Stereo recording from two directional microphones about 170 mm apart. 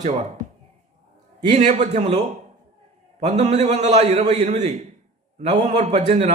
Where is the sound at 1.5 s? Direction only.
45° right (ahead or behind).